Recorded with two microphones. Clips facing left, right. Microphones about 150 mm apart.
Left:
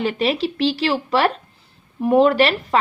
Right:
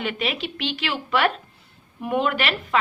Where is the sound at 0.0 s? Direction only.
35° left (ahead or behind).